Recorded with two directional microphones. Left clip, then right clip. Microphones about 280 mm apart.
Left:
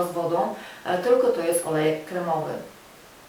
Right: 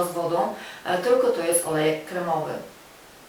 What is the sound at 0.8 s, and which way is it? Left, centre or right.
Speech, centre.